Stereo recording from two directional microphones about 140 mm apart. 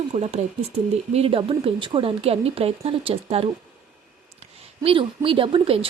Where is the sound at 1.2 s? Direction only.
40° right (ahead or behind).